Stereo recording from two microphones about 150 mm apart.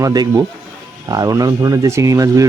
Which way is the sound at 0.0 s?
25° right (ahead or behind).